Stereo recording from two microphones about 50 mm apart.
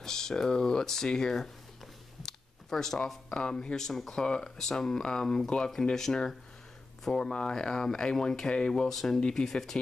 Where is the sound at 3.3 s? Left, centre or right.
Centre.